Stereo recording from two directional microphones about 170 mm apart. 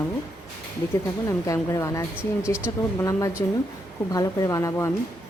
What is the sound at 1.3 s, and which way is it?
A woman's voice, 20° left (ahead or behind).